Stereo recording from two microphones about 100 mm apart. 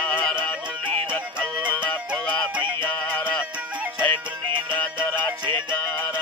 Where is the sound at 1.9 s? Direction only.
15° left (ahead or behind).